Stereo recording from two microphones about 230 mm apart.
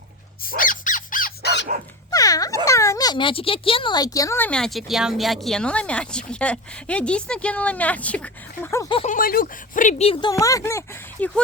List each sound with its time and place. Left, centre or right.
0.4 s a sound: left
2.0 s dog: centre
2.6 s speech: centre
9.0 s speech: left; by 11.3 s centre